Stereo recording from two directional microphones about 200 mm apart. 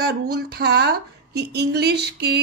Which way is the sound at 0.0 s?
55° right (ahead or behind).